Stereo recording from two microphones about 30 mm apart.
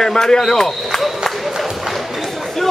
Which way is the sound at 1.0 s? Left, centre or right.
Centre.